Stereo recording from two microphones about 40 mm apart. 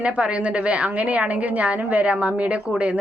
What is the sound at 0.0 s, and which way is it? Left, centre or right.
A woman's voice, right.